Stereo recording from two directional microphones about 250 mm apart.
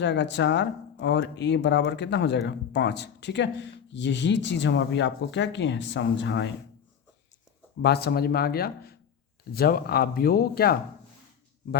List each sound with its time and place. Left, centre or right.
0.0 s speech: left
7.8 s speech: left